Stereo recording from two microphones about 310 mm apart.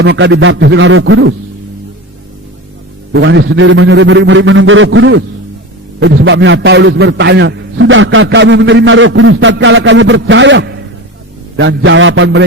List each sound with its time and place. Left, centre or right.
0.0 s a man's voice: right
3.1 s a man's voice: right